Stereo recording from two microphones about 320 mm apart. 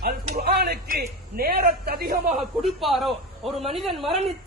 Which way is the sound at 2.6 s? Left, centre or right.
Centre.